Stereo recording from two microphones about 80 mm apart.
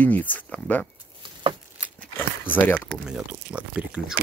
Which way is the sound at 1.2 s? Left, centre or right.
Right.